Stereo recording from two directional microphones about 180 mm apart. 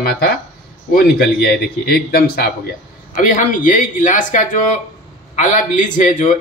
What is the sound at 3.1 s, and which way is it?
Speech, 45° left (ahead or behind).